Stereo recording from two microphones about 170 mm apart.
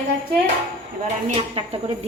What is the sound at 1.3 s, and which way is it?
Speech, 35° right (ahead or behind).